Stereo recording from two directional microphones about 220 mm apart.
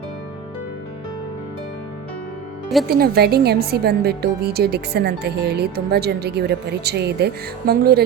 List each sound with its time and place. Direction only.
2.8 s a woman's voice: 45° right (ahead or behind)